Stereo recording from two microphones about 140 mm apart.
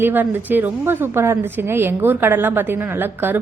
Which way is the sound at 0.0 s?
15° right (ahead or behind).